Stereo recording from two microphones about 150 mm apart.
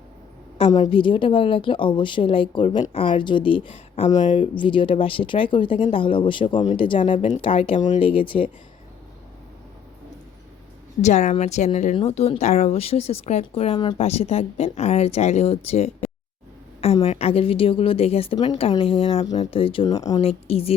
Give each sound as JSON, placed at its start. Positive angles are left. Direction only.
{"t": 0.7, "sound": "a woman's voice", "side_deg": 30}
{"t": 11.0, "sound": "speech", "side_deg": 50}
{"t": 14.0, "sound": "a woman's voice", "side_deg": 45}
{"t": 19.9, "sound": "speech", "side_deg": 25}
{"t": 20.2, "sound": "a woman's voice", "side_deg": 40}